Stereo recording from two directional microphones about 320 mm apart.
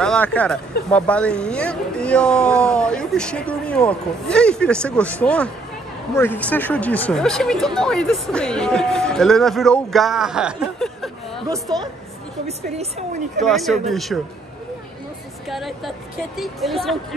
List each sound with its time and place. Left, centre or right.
0.0 s speech: centre
11.7 s a woman's voice: centre
13.4 s speech: centre
15.5 s speech: centre